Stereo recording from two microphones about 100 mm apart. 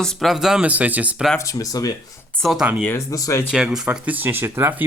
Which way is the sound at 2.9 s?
30° left (ahead or behind).